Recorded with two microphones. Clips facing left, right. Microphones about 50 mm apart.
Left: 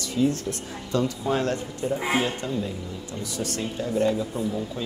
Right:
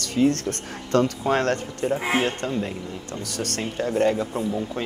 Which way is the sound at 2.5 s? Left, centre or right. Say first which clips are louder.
Right 2 dB; right.